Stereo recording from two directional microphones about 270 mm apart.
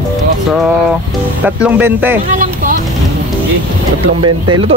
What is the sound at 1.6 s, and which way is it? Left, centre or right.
Speech, centre.